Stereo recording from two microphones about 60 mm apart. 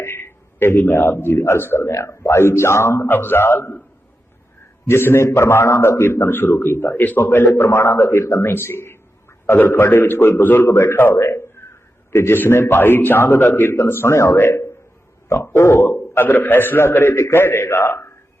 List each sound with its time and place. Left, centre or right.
0.0 s a man's voice: left
1.9 s a man's voice: left
3.1 s a man's voice: left
4.9 s a man's voice: left
7.5 s a man's voice: left
11.2 s a man's voice: left
14.3 s a man's voice: left